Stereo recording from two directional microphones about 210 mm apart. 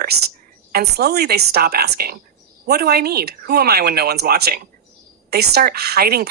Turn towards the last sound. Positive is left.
turn(degrees=-50)  # may be behind; listen again after turning